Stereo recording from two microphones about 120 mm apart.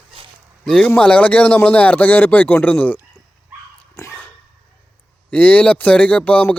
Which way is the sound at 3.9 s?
25° left (ahead or behind).